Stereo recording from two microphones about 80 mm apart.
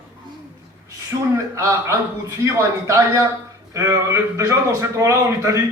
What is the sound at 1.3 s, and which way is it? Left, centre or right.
A man's voice, right.